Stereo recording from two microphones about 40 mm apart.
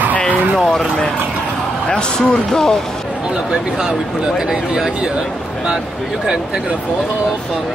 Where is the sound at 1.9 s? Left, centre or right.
Left.